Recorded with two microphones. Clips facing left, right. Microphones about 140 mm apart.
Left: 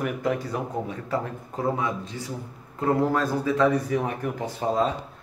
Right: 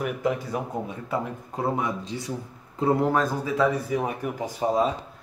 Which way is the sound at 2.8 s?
15° right (ahead or behind).